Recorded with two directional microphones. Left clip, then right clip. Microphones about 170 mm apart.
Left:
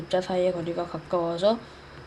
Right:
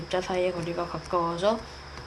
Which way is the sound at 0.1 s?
60° left (ahead or behind).